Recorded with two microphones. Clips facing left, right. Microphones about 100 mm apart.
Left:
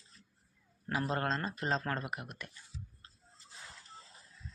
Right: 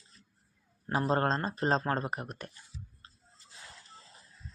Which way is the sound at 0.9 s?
35° right (ahead or behind).